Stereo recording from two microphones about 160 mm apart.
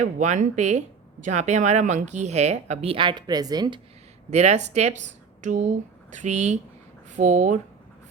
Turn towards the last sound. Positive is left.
turn(degrees=-50)  # may be behind; listen again after turning